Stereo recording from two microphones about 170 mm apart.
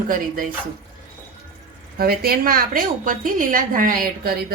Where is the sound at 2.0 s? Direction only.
65° right (ahead or behind).